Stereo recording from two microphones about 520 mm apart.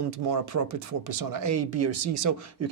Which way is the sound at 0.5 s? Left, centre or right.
Right.